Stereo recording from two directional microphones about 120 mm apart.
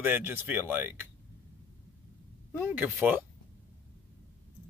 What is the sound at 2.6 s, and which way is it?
Speech, 15° right (ahead or behind).